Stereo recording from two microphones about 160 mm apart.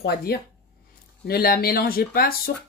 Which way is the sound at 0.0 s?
80° left.